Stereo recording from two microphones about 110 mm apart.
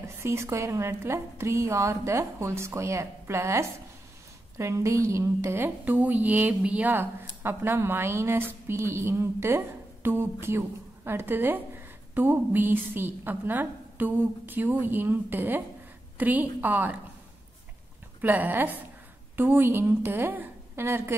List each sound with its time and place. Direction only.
0.2 s a woman's voice: 25° right (ahead or behind)
18.2 s a woman's voice: 15° right (ahead or behind)